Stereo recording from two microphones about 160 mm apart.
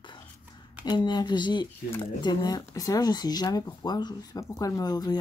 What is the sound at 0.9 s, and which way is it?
Speech, 25° left (ahead or behind).